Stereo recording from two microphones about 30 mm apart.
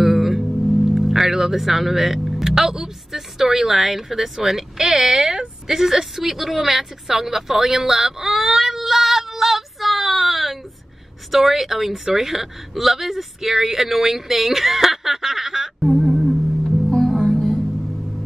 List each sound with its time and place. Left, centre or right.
0.0 s music: centre
2.2 s vehicle: centre
2.5 s a woman's voice: centre
8.6 s child singing: centre
11.3 s a woman's voice: centre
15.9 s music: centre
17.3 s music: centre